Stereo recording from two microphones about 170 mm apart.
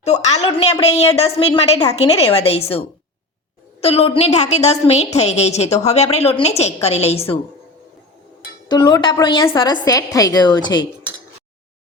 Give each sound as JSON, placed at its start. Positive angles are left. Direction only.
{"t": 0.0, "sound": "a woman's voice", "side_deg": 40}
{"t": 8.6, "sound": "a woman's voice", "side_deg": 25}